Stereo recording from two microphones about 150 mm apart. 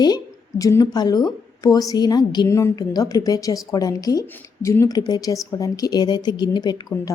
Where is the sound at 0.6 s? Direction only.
25° left (ahead or behind).